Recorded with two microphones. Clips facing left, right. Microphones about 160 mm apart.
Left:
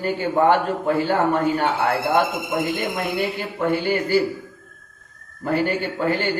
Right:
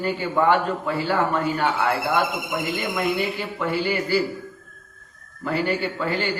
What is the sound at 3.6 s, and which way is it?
Speech, 50° left (ahead or behind).